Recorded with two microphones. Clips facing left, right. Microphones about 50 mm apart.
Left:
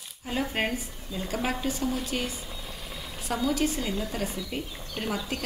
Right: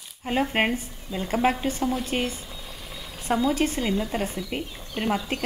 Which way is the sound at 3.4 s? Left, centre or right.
Right.